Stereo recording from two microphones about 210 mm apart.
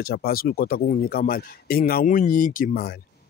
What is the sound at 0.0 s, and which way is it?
Speech, 45° left (ahead or behind).